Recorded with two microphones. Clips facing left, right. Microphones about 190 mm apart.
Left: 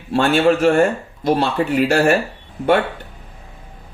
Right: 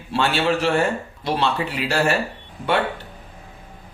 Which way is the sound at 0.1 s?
45° left (ahead or behind).